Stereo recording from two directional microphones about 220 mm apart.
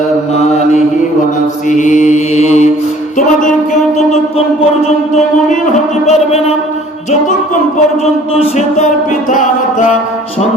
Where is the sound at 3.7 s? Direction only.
30° left (ahead or behind).